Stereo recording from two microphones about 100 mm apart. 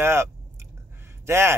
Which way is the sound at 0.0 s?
25° right (ahead or behind).